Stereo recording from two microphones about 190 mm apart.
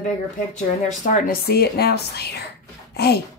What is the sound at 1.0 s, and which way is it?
A woman's voice, 45° left (ahead or behind).